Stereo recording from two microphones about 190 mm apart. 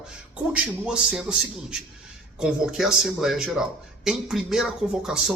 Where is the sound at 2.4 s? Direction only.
5° right (ahead or behind).